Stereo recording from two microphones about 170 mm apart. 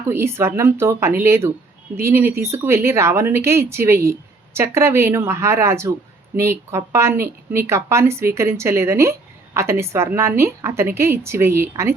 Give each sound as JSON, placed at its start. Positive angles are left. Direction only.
{"t": 0.1, "sound": "a woman's voice", "side_deg": -15}